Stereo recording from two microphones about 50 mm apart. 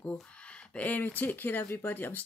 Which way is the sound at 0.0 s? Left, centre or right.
Left.